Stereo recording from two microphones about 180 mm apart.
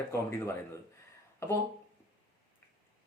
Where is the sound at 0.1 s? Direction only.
15° left (ahead or behind).